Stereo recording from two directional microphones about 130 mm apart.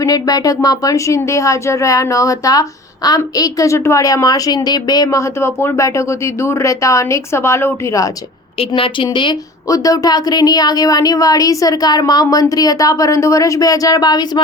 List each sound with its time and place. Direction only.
0.0 s speech: 30° left (ahead or behind)
8.5 s a woman's voice: 40° left (ahead or behind)